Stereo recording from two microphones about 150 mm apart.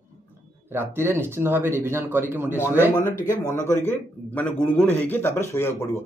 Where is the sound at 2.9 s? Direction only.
25° left (ahead or behind).